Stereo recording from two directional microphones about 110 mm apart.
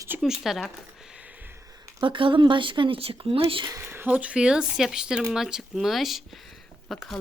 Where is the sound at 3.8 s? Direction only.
20° right (ahead or behind).